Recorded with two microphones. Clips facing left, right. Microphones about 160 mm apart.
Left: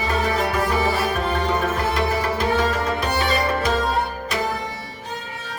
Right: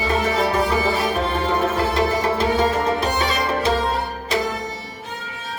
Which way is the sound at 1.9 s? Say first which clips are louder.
Right 2 dB; 25° right (ahead or behind).